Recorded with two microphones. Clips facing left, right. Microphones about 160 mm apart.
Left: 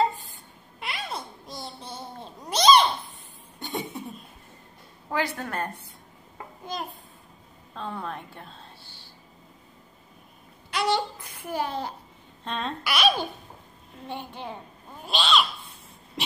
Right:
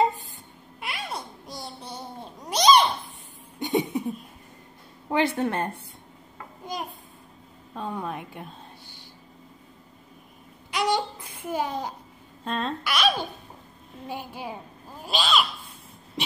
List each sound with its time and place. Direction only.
0.7 s babbling: 10° right (ahead or behind)
3.5 s a sound: 20° right (ahead or behind)
5.1 s speech: 25° right (ahead or behind)
6.6 s a sound: 15° right (ahead or behind)
10.7 s babbling: 15° right (ahead or behind)
11.2 s a child's voice: 20° right (ahead or behind)
12.4 s a child's voice: centre (ahead or behind)